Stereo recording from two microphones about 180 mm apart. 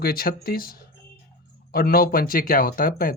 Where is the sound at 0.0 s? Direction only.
55° left (ahead or behind).